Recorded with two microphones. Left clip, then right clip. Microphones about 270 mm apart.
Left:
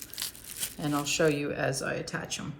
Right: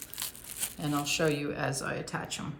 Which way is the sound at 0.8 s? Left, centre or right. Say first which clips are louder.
Left 2 dB; centre.